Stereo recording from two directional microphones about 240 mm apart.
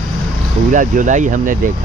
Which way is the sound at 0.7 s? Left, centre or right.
Right.